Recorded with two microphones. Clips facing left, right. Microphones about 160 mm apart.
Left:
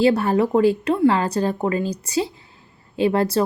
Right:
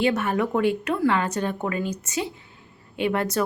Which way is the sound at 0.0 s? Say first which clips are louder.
Left 5 dB; 35° left (ahead or behind).